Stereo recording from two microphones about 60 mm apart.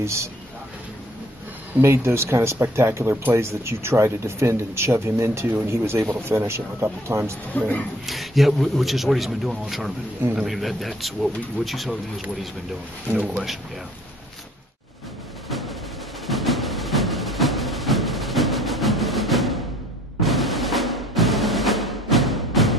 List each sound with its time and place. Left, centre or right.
0.0 s a man's voice: right
1.8 s speech: right
7.5 s speech: left
8.1 s a man's voice: centre
16.3 s music: centre